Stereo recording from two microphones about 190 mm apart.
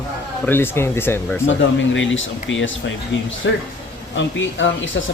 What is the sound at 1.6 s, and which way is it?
Speech, 80° left.